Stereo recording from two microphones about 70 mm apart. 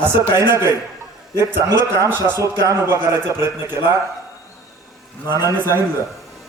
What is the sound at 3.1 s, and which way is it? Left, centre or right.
Speech, right.